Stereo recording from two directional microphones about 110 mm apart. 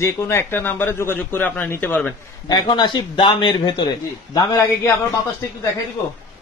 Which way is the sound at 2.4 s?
40° left (ahead or behind).